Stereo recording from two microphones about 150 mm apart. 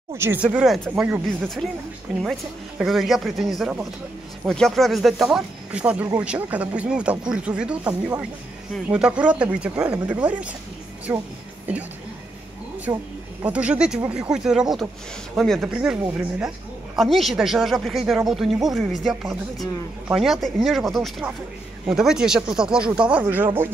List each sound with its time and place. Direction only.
0.2 s a woman's voice: 15° right (ahead or behind)
12.9 s speech: 20° right (ahead or behind)
13.5 s a woman's voice: 10° right (ahead or behind)